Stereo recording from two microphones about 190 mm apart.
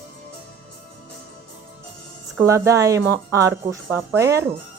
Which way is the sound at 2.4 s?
15° right (ahead or behind).